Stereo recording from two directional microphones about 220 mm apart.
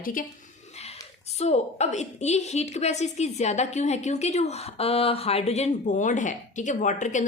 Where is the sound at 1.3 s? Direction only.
30° left (ahead or behind).